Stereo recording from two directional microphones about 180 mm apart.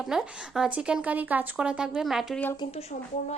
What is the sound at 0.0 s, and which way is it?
A woman's voice, 5° right (ahead or behind).